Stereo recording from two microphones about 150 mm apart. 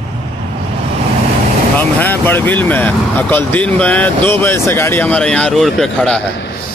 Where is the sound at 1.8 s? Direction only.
10° left (ahead or behind).